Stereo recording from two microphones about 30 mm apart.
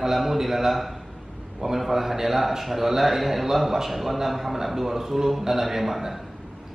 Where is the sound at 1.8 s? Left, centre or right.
Centre.